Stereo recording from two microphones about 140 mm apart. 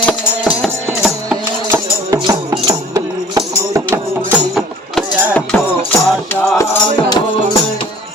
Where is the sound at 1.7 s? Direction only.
25° right (ahead or behind).